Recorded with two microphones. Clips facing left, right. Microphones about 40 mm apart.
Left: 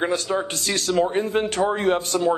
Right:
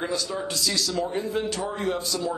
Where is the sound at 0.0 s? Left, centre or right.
Left.